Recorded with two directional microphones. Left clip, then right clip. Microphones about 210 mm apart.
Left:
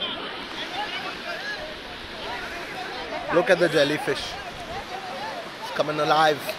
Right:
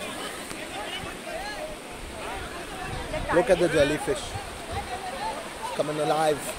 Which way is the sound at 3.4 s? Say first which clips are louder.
Left 3 dB; 5° right (ahead or behind).